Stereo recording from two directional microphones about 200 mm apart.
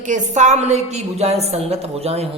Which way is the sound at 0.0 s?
35° right (ahead or behind).